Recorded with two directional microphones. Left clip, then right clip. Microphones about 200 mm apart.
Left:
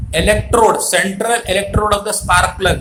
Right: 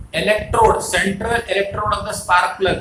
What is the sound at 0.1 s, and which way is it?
Speech, 55° left (ahead or behind).